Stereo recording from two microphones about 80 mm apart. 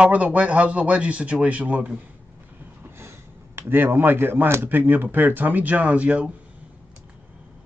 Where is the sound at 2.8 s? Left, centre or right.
Right.